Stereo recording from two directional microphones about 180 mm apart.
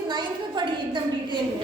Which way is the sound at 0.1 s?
25° right (ahead or behind).